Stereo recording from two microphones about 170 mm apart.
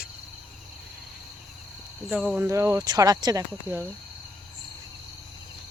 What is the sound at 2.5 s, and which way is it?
Speech, 15° right (ahead or behind).